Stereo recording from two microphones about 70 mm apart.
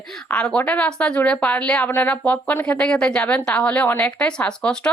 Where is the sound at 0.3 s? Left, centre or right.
Centre.